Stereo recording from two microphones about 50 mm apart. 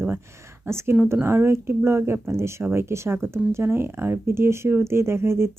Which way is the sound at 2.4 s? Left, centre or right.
Right.